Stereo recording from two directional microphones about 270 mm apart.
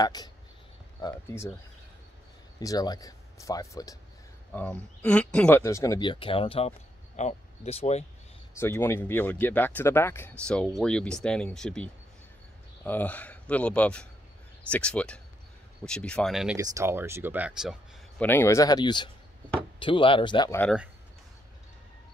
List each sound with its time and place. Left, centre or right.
0.0 s speech: centre
2.6 s speech: centre
8.5 s speech: centre
18.2 s speech: centre